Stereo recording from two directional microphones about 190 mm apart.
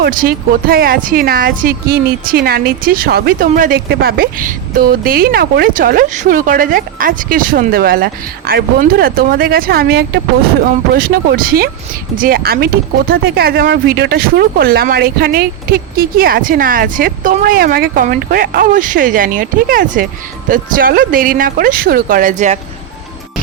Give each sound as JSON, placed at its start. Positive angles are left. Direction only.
{"t": 0.0, "sound": "speech", "side_deg": -50}